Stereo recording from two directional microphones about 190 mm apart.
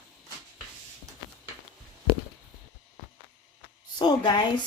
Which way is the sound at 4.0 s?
25° left (ahead or behind).